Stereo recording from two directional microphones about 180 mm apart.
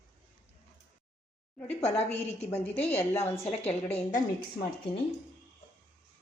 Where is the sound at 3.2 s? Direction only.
35° left (ahead or behind).